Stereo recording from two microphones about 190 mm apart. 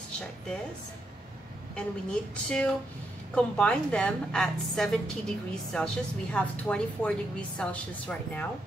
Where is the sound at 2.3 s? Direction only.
5° left (ahead or behind).